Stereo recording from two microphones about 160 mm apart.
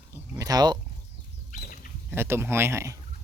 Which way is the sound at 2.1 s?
15° right (ahead or behind).